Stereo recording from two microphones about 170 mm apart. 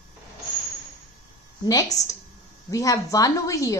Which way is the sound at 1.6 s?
20° left (ahead or behind).